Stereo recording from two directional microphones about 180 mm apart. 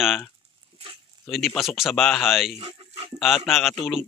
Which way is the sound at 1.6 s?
Centre (ahead or behind).